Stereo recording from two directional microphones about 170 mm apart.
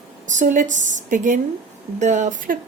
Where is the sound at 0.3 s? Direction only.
50° right (ahead or behind).